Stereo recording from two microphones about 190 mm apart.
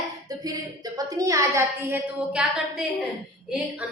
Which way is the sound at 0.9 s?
15° right (ahead or behind).